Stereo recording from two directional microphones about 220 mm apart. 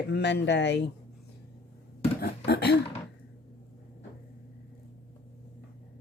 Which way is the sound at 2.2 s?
45° left (ahead or behind).